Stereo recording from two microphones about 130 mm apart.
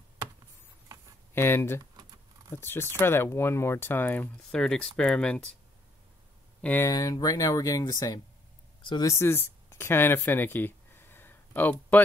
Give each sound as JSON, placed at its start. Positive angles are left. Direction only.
{"t": 1.3, "sound": "speech", "side_deg": 15}
{"t": 6.6, "sound": "speech", "side_deg": 15}
{"t": 6.9, "sound": "speech", "side_deg": 25}
{"t": 9.1, "sound": "speech", "side_deg": 20}